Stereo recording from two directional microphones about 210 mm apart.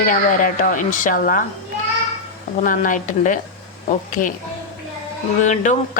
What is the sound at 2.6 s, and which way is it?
Speech, 40° left (ahead or behind).